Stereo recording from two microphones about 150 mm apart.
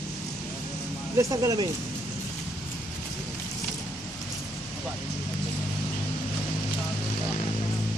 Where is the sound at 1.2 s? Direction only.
25° right (ahead or behind).